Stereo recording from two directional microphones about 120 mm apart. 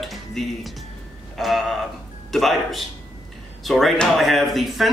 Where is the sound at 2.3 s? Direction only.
Centre (ahead or behind).